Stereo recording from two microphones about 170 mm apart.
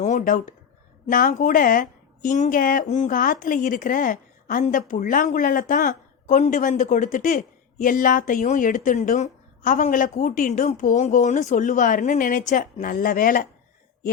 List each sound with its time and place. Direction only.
0.0 s a woman's voice: 45° left (ahead or behind)